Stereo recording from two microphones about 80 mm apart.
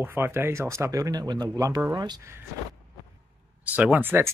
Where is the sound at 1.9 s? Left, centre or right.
Right.